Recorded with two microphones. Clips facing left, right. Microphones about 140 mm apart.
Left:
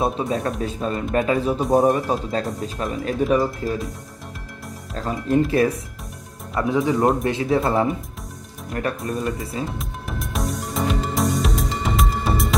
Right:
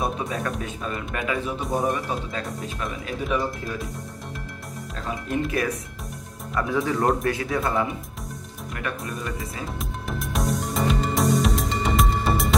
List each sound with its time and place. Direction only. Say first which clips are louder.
0.0 s speech: left 5 dB; 30° left (ahead or behind)
5.3 s speech: left 8 dB; 30° left (ahead or behind)
6.7 s speech: left 4 dB; 20° left (ahead or behind)
9.7 s music: even; centre (ahead or behind)